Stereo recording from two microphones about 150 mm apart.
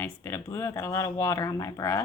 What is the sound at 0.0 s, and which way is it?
Speech, 15° left (ahead or behind).